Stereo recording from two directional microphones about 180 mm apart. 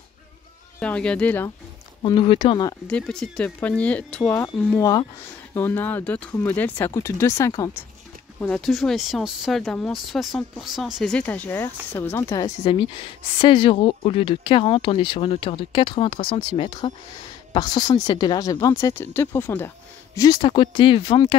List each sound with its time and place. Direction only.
0.7 s speech: 5° left (ahead or behind)
2.0 s speech: 30° left (ahead or behind)
2.9 s speech: 5° left (ahead or behind)
8.4 s speech: 5° left (ahead or behind)
13.4 s speech: 30° left (ahead or behind); by 19.7 s 10° left (ahead or behind)
20.2 s speech: 25° left (ahead or behind)